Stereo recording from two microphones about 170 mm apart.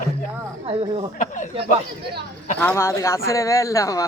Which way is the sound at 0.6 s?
35° right (ahead or behind).